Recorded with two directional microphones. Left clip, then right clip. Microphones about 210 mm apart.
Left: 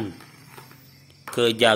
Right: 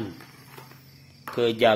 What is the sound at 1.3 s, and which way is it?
Speech, 20° left (ahead or behind).